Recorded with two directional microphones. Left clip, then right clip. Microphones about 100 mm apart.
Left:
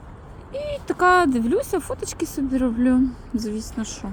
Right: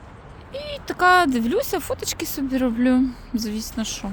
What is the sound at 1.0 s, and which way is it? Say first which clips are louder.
Speech: right 1 dB; 60° right (ahead or behind).